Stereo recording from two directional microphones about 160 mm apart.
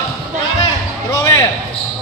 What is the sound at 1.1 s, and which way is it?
Speech, 20° left (ahead or behind).